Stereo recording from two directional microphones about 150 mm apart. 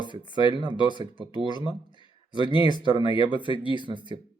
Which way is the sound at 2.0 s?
30° left (ahead or behind).